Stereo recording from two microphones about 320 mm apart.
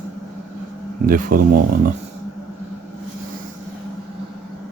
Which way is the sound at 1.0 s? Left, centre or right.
Right.